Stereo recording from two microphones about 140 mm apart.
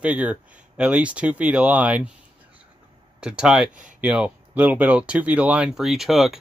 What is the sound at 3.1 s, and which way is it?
Speech, 5° right (ahead or behind).